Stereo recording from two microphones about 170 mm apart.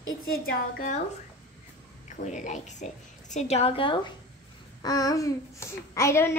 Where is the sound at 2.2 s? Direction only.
45° left (ahead or behind).